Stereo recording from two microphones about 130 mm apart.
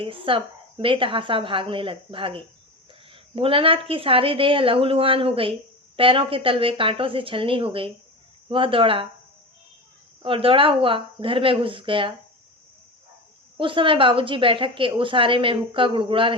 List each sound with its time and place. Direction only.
0.0 s a woman's voice: 45° right (ahead or behind)
10.2 s a woman's voice: 45° right (ahead or behind)
13.6 s a woman's voice: 40° right (ahead or behind)